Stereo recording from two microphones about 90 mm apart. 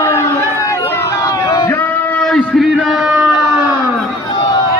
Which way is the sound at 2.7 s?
5° right (ahead or behind).